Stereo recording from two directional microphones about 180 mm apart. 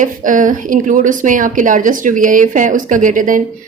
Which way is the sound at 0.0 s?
45° right (ahead or behind).